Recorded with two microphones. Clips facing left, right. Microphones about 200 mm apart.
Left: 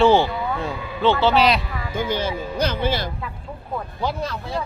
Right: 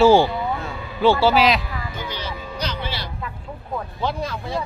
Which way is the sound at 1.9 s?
50° left (ahead or behind).